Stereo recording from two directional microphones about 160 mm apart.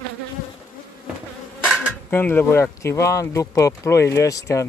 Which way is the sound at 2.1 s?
10° left (ahead or behind).